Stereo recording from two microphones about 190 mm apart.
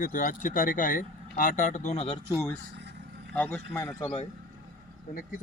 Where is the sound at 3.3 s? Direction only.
10° left (ahead or behind).